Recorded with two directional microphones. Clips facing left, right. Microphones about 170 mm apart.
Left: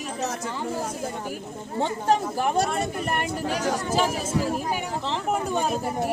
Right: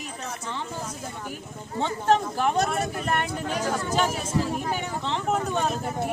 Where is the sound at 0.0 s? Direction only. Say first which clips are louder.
Left 6 dB; 90° left.